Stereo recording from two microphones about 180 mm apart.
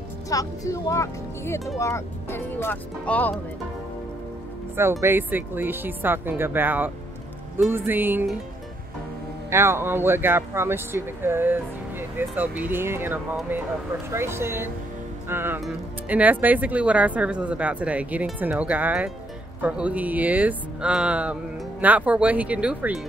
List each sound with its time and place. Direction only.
0.3 s speech: 20° left (ahead or behind)
5.0 s speech: 10° right (ahead or behind)
9.5 s speech: 15° right (ahead or behind)